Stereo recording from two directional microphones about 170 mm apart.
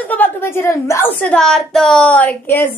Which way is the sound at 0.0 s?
10° left (ahead or behind).